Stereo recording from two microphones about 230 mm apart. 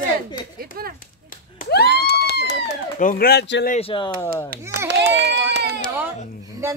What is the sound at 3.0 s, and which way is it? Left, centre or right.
Speech, left.